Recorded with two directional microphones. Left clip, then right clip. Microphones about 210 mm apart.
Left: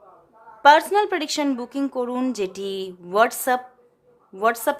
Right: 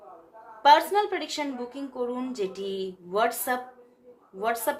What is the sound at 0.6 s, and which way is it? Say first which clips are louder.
A woman's voice: left 4 dB; 40° left (ahead or behind).